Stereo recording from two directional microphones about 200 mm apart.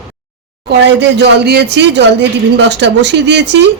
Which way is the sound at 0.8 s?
60° right (ahead or behind).